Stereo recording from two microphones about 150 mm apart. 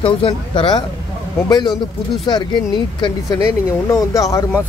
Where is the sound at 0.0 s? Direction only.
35° left (ahead or behind).